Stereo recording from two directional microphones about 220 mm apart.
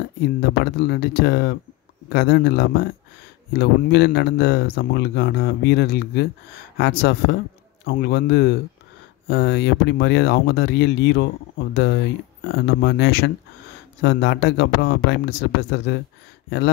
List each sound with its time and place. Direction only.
0.4 s speech: 50° left (ahead or behind)